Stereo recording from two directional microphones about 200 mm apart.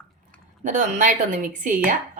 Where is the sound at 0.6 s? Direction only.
40° right (ahead or behind).